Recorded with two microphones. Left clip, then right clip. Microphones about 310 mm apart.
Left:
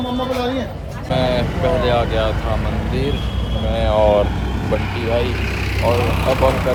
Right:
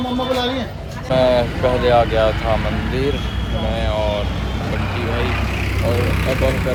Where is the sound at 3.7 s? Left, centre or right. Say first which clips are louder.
Left 7 dB; centre.